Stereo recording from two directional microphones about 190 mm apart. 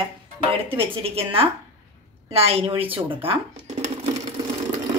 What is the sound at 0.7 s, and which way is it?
Speech, 30° right (ahead or behind).